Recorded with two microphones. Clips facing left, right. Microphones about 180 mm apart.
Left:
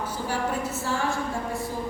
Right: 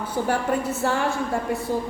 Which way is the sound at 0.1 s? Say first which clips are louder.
Right 8 dB; 60° right (ahead or behind).